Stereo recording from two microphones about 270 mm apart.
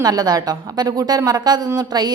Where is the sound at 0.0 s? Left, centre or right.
Centre.